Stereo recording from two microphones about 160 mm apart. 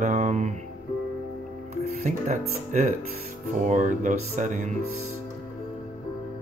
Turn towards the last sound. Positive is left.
turn(degrees=-50)  # may be behind; listen again after turning